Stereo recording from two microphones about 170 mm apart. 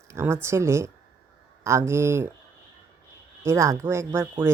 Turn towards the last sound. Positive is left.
turn(degrees=-15)  # may be behind; listen again after turning